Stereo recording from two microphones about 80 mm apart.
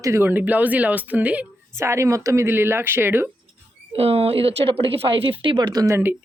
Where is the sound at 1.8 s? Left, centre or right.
Right.